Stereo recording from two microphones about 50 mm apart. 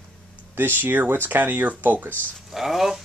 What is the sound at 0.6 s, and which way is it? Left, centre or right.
Speech, right.